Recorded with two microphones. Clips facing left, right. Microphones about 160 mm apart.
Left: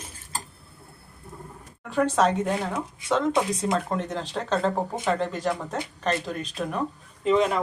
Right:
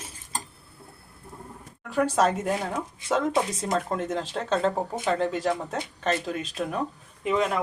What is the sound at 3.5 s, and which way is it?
Speech, centre (ahead or behind).